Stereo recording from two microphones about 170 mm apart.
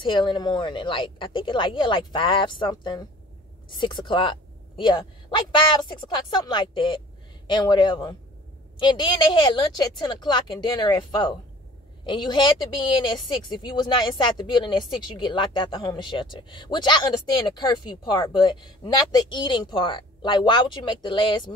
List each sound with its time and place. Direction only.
0.0 s speech: 30° left (ahead or behind)